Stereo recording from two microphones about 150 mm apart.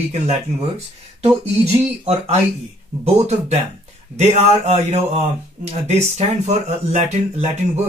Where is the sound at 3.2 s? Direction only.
50° right (ahead or behind).